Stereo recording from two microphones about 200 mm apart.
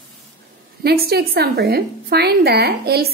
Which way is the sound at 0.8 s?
50° right (ahead or behind).